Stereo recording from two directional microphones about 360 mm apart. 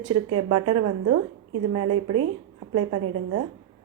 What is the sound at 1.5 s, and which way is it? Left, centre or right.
Speech, right.